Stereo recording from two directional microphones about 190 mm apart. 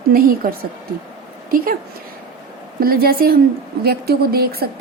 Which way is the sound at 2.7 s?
50° right (ahead or behind).